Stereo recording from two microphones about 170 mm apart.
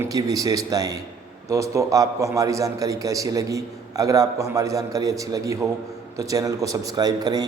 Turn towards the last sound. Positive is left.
turn(degrees=-20)  # may be behind; listen again after turning